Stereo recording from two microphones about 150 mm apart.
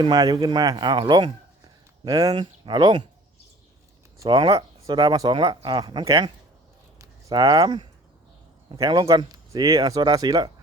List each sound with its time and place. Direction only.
0.0 s speech: 25° right (ahead or behind)
4.3 s speech: 35° right (ahead or behind)